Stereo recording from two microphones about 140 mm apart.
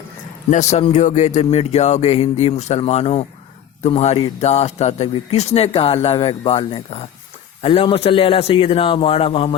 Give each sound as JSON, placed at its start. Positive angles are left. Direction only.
{"t": 0.5, "sound": "a man's voice", "side_deg": 55}